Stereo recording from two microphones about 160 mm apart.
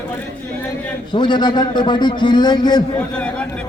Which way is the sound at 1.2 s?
30° left (ahead or behind).